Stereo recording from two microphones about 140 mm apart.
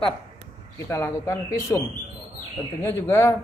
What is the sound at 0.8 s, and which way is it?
Speech, 20° left (ahead or behind).